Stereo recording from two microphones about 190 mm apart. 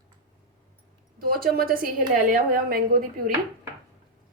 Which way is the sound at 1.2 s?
50° right (ahead or behind).